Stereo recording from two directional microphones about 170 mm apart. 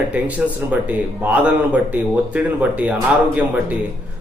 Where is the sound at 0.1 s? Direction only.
10° right (ahead or behind).